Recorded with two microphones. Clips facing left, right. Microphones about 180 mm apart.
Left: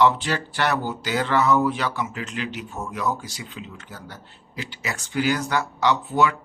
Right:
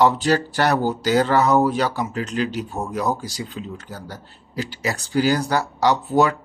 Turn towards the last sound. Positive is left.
turn(degrees=-40)  # may be behind; listen again after turning